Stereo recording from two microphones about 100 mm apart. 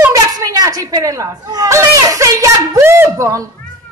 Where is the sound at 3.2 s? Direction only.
35° right (ahead or behind).